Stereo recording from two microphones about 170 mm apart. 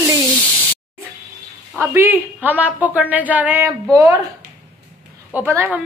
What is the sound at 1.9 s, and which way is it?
A woman's voice, 10° right (ahead or behind).